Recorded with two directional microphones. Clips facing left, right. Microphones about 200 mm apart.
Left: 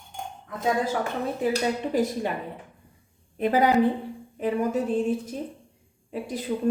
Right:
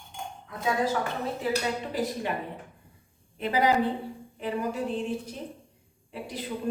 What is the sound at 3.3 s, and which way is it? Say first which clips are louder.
Speech: left 4 dB; 50° left (ahead or behind).